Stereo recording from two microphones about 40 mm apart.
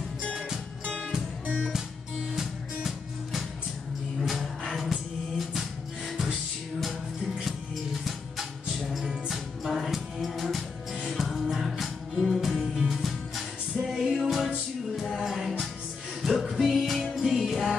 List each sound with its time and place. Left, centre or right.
0.8 s music: left
2.3 s music: centre
7.4 s music: centre